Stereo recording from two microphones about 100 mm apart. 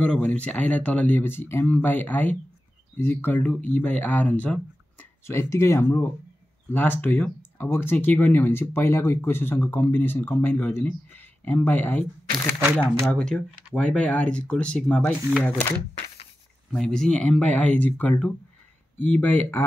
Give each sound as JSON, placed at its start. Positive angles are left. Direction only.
{"t": 0.0, "sound": "speech", "side_deg": 10}
{"t": 5.2, "sound": "speech", "side_deg": 25}
{"t": 12.6, "sound": "speech", "side_deg": -20}
{"t": 13.1, "sound": "speech", "side_deg": 5}
{"t": 16.7, "sound": "speech", "side_deg": 5}